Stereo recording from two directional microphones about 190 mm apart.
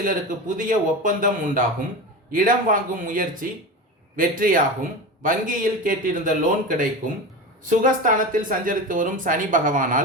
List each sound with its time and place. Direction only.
0.0 s a man's voice: 45° right (ahead or behind)